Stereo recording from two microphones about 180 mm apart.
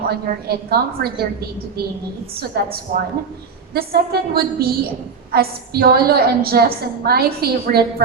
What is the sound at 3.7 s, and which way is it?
A woman's voice, 55° right (ahead or behind).